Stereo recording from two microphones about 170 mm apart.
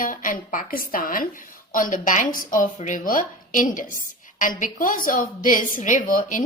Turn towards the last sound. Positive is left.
turn(degrees=50)  # may be behind; listen again after turning